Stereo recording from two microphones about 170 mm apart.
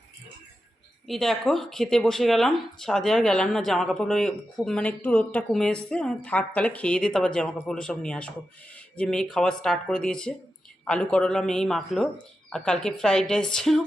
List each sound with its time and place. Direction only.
1.0 s speech: centre (ahead or behind)